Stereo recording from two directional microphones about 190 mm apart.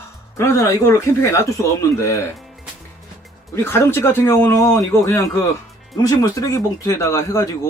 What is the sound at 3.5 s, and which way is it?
Speech, 15° left (ahead or behind).